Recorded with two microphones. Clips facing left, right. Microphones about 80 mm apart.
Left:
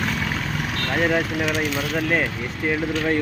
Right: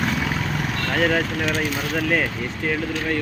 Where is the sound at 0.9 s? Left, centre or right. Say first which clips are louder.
Even; centre.